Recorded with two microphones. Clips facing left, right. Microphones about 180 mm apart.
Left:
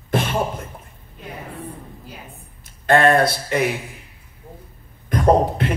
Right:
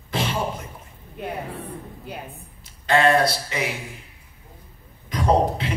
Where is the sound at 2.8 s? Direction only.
55° left (ahead or behind).